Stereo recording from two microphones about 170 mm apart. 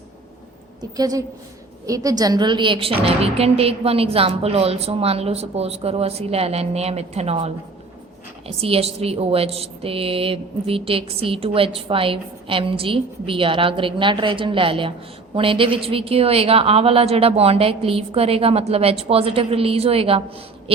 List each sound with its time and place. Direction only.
0.8 s a woman's voice: 20° right (ahead or behind)